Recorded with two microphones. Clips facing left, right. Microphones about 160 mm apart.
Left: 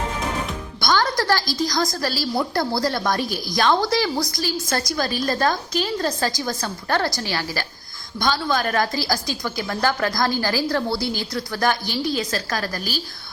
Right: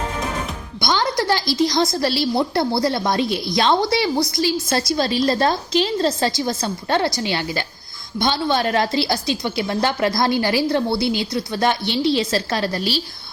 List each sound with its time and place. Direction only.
0.8 s a woman's voice: 20° right (ahead or behind)